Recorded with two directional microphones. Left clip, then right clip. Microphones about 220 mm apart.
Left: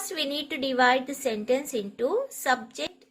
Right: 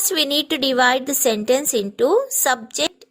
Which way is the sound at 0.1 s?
50° right (ahead or behind).